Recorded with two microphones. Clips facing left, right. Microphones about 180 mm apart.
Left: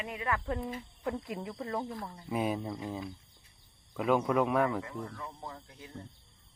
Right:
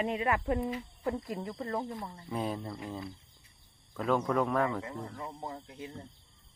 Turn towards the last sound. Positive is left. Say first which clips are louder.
# right 5 dB
turn(degrees=-20)  # may be behind; listen again after turning